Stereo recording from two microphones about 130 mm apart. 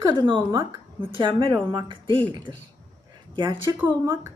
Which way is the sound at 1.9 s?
40° right (ahead or behind).